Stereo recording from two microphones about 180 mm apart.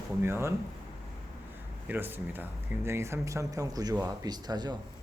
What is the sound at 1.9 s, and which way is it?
Speech, 10° right (ahead or behind).